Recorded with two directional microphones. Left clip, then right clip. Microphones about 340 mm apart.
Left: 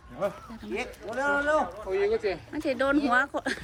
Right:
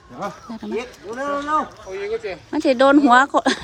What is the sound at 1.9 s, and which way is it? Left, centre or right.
Speech, left.